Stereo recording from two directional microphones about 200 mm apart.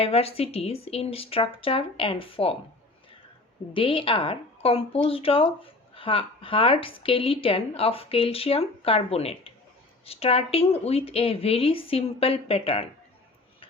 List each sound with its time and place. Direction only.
0.0 s speech: 30° left (ahead or behind)
3.8 s speech: 25° left (ahead or behind)